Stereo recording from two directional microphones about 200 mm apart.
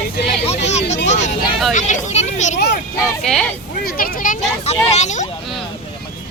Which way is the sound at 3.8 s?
45° left (ahead or behind).